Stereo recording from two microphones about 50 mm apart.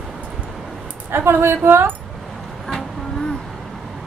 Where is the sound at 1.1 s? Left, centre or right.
Right.